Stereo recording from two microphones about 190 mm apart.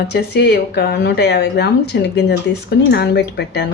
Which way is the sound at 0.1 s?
60° left (ahead or behind).